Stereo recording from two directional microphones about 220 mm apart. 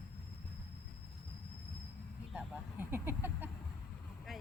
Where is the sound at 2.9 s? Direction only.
10° right (ahead or behind).